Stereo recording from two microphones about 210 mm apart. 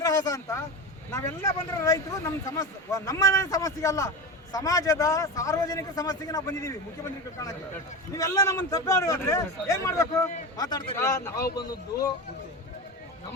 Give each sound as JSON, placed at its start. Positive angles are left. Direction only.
{"t": 0.0, "sound": "speech", "side_deg": 15}
{"t": 8.1, "sound": "speech", "side_deg": 15}